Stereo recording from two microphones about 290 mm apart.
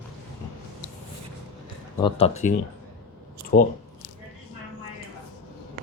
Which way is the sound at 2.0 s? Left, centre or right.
Left.